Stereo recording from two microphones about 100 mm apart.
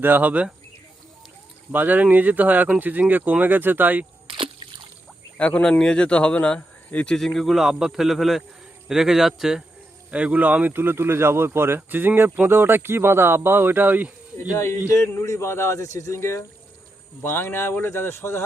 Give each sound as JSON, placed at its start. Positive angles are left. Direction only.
{"t": 0.0, "sound": "speech", "side_deg": -15}
{"t": 1.7, "sound": "speech", "side_deg": -15}
{"t": 5.4, "sound": "speech", "side_deg": 15}
{"t": 14.5, "sound": "speech", "side_deg": 25}